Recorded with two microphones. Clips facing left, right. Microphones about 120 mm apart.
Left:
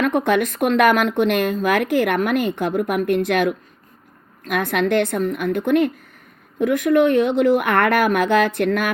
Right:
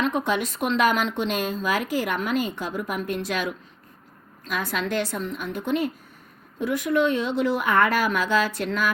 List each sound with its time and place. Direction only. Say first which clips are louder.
0.0 s speech: left 6 dB; 55° left (ahead or behind)